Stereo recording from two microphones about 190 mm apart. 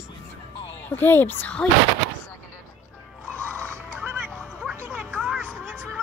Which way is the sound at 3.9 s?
10° right (ahead or behind).